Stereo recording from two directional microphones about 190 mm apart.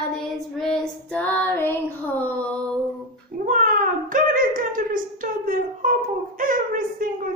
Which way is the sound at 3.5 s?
45° right (ahead or behind).